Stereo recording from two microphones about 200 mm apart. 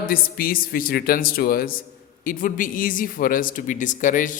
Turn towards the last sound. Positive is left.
turn(degrees=40)  # may be behind; listen again after turning